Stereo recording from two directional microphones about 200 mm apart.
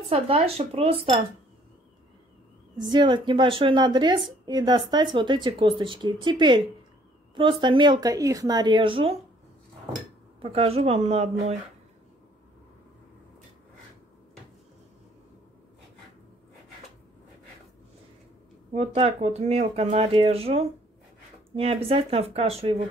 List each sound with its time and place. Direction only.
0.1 s a woman's voice: 30° right (ahead or behind)
2.8 s a woman's voice: 25° right (ahead or behind)
7.6 s a woman's voice: 20° right (ahead or behind)
10.4 s a woman's voice: 30° right (ahead or behind)
18.7 s a woman's voice: 30° right (ahead or behind)